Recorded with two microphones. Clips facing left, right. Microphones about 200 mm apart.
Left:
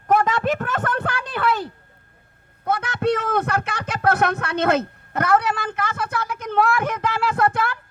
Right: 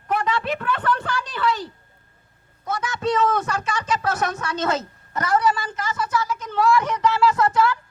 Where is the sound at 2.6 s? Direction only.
60° left (ahead or behind).